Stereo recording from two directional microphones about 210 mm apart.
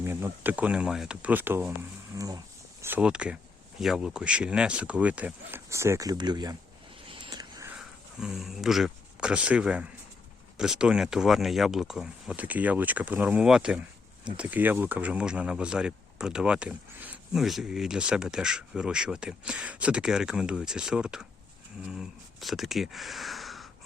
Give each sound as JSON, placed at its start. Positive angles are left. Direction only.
{"t": 0.0, "sound": "speech", "side_deg": -10}
{"t": 7.1, "sound": "a sound", "side_deg": -20}
{"t": 7.8, "sound": "speech", "side_deg": 0}